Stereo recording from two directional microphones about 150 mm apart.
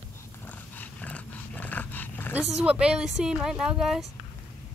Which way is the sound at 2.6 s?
5° right (ahead or behind).